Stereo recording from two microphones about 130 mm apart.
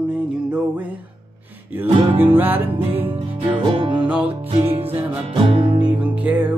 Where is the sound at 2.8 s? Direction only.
45° right (ahead or behind).